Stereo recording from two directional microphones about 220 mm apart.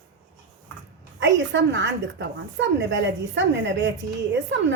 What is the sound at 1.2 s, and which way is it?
A woman's voice, 55° right (ahead or behind).